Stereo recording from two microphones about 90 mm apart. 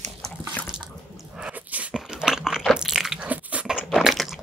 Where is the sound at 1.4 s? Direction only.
15° right (ahead or behind).